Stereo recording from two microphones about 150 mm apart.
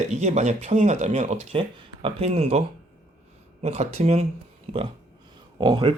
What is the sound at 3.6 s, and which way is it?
Speech, 45° right (ahead or behind).